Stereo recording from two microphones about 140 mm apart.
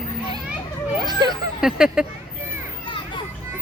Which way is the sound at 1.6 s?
5° right (ahead or behind).